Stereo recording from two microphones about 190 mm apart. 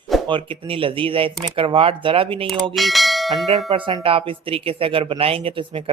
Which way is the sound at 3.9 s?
30° right (ahead or behind).